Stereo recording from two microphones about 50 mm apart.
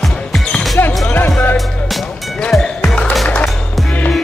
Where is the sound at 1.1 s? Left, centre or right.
Left.